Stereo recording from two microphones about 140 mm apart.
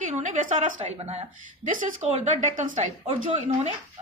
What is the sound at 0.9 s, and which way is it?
A woman's voice, 45° right (ahead or behind).